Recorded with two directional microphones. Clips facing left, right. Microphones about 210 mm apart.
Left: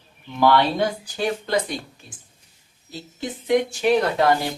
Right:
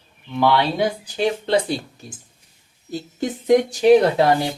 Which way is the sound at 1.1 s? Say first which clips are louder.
Right 4 dB; 25° right (ahead or behind).